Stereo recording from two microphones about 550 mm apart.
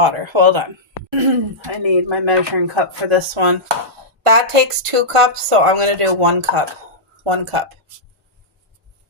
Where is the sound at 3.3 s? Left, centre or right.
Right.